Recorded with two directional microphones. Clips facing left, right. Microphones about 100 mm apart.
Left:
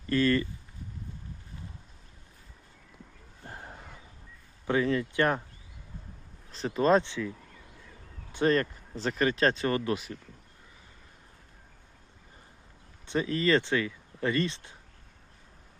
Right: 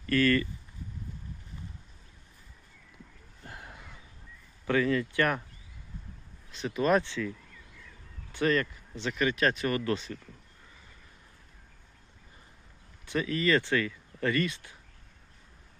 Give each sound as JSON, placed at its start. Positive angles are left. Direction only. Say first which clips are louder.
{"t": 0.0, "sound": "a sound", "louder": "even", "side_deg": 25}
{"t": 3.4, "sound": "a sound", "louder": "left 2 dB", "side_deg": 35}
{"t": 4.6, "sound": "speech", "louder": "even", "side_deg": 20}
{"t": 6.5, "sound": "speech", "louder": "left 2 dB", "side_deg": 35}
{"t": 8.4, "sound": "speech", "louder": "left 2 dB", "side_deg": 40}
{"t": 9.9, "sound": "speech", "louder": "even", "side_deg": 5}
{"t": 13.1, "sound": "speech", "louder": "left 1 dB", "side_deg": 30}